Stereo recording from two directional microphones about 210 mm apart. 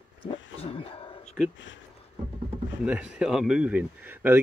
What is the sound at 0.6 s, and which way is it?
Speech, 25° left (ahead or behind).